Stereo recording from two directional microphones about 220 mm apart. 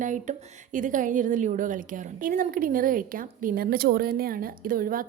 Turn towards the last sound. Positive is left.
turn(degrees=-40)  # may be behind; listen again after turning